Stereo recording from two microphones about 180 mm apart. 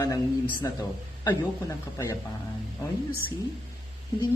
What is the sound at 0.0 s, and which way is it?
Speech, 20° left (ahead or behind).